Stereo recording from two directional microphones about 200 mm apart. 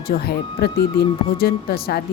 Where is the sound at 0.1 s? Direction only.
55° left (ahead or behind).